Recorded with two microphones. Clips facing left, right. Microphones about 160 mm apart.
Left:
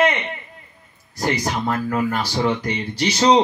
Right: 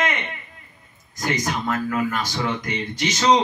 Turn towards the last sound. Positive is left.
turn(degrees=35)  # may be behind; listen again after turning